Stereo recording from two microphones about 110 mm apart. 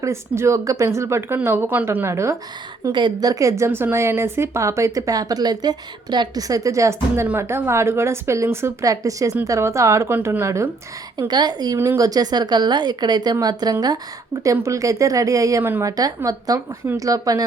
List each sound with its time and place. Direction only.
0.0 s a woman's voice: 25° right (ahead or behind)
2.9 s a woman's voice: 40° right (ahead or behind)
3.6 s a woman's voice: 20° right (ahead or behind)
11.2 s a woman's voice: 40° right (ahead or behind)
11.8 s a woman's voice: 30° right (ahead or behind)